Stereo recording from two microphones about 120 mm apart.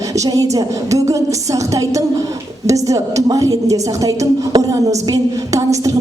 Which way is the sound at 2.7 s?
30° right (ahead or behind).